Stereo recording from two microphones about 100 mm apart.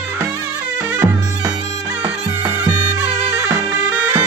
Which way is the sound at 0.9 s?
30° right (ahead or behind).